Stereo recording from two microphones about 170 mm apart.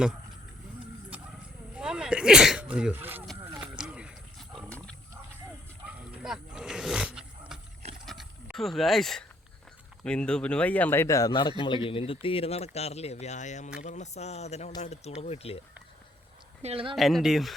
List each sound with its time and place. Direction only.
1.7 s sneeze: 5° right (ahead or behind)
3.5 s roaring cats: 5° right (ahead or behind)
5.8 s dog: 5° right (ahead or behind)
8.0 s a sound: centre (ahead or behind)
10.0 s speech: 5° left (ahead or behind); by 15.5 s 40° left (ahead or behind)
16.6 s speech: 35° right (ahead or behind)
16.9 s speech: centre (ahead or behind)